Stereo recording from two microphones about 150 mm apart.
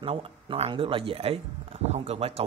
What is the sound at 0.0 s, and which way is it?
Speech, 40° right (ahead or behind).